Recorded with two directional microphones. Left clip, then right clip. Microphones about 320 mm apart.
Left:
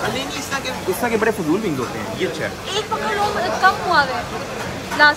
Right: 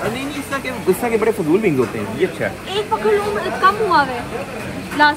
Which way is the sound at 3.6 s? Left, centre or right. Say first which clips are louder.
Right 2 dB; centre.